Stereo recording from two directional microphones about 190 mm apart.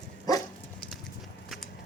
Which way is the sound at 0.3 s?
20° left (ahead or behind).